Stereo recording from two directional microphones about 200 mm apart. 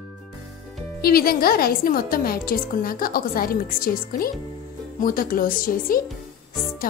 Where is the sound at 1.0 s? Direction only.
50° left (ahead or behind).